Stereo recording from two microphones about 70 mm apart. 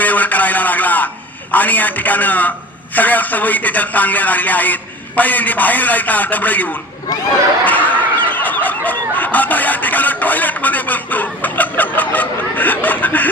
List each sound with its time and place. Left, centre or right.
0.0 s radio: left
1.5 s speech: left
7.6 s snicker: left